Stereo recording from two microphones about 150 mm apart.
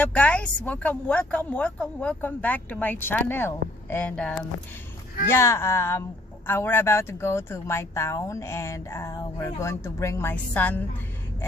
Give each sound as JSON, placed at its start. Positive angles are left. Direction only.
{"t": 0.0, "sound": "speech", "side_deg": 10}